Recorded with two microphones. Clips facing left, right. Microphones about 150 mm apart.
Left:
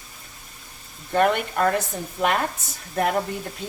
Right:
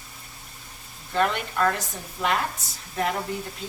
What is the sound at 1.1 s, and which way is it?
Speech, 55° left (ahead or behind).